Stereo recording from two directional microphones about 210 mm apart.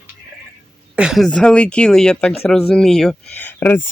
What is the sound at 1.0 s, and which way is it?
Speech, centre (ahead or behind).